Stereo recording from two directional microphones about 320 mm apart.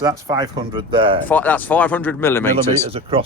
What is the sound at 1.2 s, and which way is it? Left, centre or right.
A man's voice, centre.